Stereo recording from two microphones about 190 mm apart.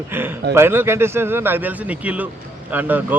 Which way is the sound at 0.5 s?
10° right (ahead or behind).